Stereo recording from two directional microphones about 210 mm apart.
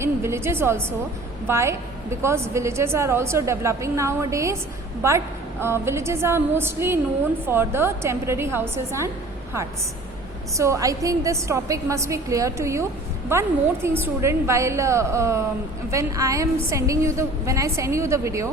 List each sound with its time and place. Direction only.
0.0 s a woman's voice: 10° right (ahead or behind)
10.6 s a woman's voice: 15° right (ahead or behind)